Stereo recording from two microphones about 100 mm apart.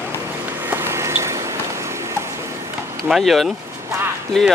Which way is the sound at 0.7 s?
25° right (ahead or behind).